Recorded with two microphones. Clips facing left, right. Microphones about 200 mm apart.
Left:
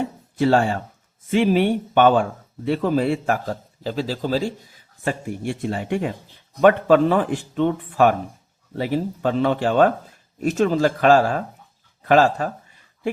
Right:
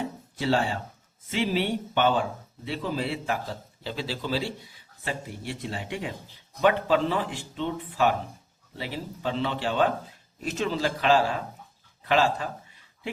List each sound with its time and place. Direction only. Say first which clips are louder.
0.3 s a man's voice: left 8 dB; 50° left (ahead or behind)